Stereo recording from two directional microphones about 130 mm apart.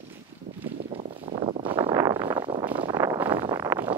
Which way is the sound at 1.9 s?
30° right (ahead or behind).